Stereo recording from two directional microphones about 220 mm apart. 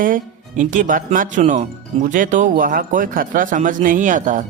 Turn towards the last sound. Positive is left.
turn(degrees=-35)  # may be behind; listen again after turning